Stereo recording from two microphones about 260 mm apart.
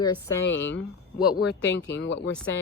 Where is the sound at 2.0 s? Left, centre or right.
Left.